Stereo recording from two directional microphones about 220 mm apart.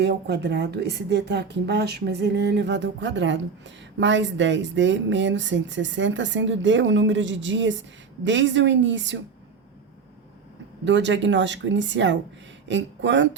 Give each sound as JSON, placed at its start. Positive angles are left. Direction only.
{"t": 0.0, "sound": "speech", "side_deg": -50}
{"t": 10.8, "sound": "speech", "side_deg": -55}